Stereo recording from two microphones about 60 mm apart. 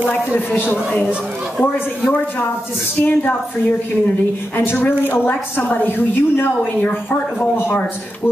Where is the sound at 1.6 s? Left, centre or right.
Left.